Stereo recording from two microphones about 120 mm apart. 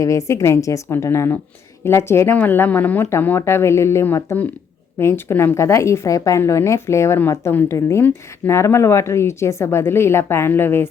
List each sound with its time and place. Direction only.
0.0 s a woman's voice: 25° left (ahead or behind)